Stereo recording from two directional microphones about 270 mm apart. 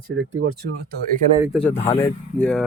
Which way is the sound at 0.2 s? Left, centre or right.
Right.